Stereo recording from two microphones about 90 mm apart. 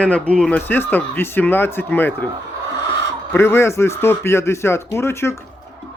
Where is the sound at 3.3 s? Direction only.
30° left (ahead or behind).